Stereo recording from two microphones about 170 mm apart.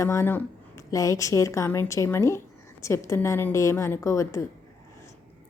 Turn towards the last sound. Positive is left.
turn(degrees=15)  # may be behind; listen again after turning